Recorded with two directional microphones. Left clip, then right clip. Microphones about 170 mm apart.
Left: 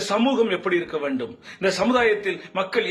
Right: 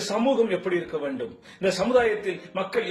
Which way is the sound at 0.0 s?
15° left (ahead or behind).